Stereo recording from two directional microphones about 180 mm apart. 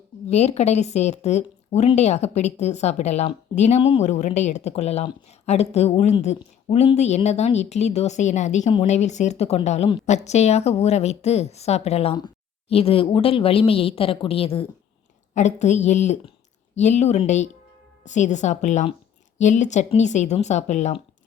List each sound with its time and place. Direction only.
0.3 s a woman's voice: 35° left (ahead or behind)